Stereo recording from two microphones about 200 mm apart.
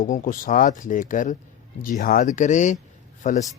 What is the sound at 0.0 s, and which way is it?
Speech, 40° left (ahead or behind).